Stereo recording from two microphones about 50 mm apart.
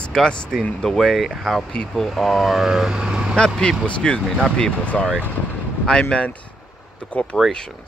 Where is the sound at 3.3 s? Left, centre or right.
Centre.